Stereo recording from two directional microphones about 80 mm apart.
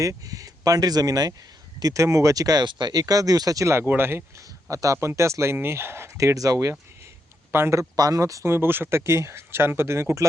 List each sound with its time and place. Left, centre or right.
0.0 s speech: right
1.8 s speech: right
2.6 s speech: right
3.8 s speech: right
4.7 s speech: right
7.9 s speech: right
8.5 s speech: right